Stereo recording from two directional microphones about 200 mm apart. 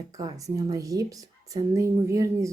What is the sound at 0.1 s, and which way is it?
A woman's voice, 20° right (ahead or behind).